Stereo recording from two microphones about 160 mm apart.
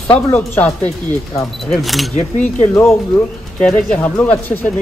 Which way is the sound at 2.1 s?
50° left (ahead or behind).